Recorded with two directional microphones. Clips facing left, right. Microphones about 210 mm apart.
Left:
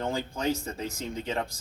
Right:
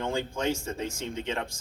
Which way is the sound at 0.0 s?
35° left (ahead or behind).